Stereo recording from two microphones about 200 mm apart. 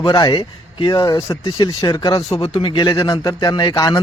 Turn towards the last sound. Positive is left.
turn(degrees=20)  # may be behind; listen again after turning